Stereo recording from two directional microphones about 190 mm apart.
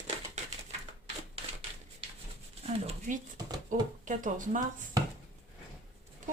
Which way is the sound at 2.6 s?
40° right (ahead or behind).